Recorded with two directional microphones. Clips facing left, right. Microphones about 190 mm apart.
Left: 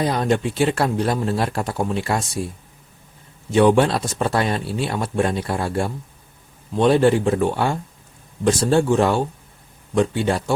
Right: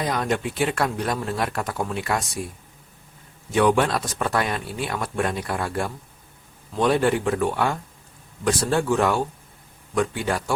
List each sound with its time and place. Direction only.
0.0 s speech: 30° left (ahead or behind)
3.5 s speech: 30° left (ahead or behind)